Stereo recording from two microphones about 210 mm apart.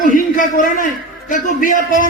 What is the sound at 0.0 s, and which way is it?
A man's voice, 40° left (ahead or behind).